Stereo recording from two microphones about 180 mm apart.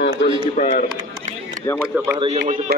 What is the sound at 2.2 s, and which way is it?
Speech, 40° right (ahead or behind).